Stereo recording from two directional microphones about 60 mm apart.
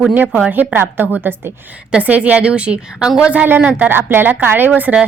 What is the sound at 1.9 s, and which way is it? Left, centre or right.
A woman's voice, right.